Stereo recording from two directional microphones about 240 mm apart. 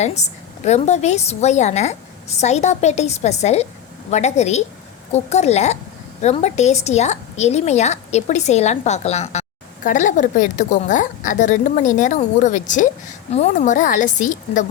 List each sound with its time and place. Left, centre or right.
0.0 s a woman's voice: left